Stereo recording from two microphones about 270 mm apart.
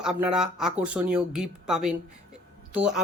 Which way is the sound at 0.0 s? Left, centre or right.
Centre.